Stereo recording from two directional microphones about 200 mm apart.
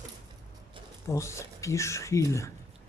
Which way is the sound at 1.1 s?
15° left (ahead or behind).